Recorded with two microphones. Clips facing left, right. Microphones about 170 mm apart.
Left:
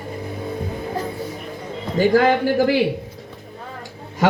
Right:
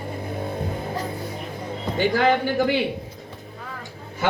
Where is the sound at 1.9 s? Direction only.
45° left (ahead or behind).